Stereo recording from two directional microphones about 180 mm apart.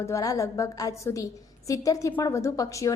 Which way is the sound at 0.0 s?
20° left (ahead or behind).